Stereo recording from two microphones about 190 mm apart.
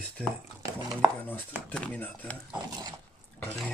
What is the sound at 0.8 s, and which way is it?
Chopping, 20° right (ahead or behind).